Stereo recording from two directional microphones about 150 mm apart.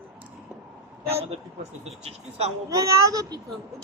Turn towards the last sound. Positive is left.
turn(degrees=-20)  # may be behind; listen again after turning